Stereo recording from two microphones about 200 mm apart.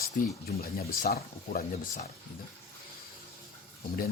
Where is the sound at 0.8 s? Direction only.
50° left (ahead or behind).